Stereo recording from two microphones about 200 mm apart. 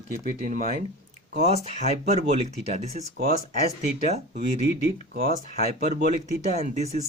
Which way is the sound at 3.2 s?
50° right (ahead or behind).